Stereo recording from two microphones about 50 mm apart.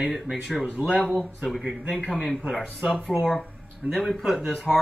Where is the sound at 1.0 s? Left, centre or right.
Left.